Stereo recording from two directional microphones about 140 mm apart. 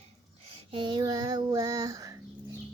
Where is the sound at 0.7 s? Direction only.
35° right (ahead or behind).